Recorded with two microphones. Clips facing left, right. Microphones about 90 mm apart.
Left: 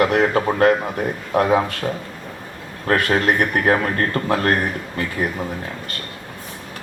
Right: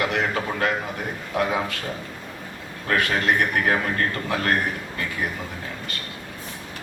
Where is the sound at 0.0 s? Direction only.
45° left (ahead or behind).